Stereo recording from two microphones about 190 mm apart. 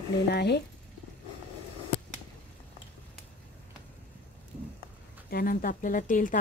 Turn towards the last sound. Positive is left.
turn(degrees=45)  # may be behind; listen again after turning